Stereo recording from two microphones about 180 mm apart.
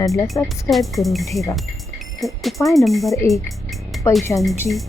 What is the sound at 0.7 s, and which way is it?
Speech, centre (ahead or behind).